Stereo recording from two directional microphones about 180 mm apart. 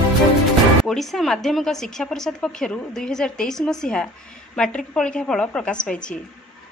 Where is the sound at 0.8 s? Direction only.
Centre (ahead or behind).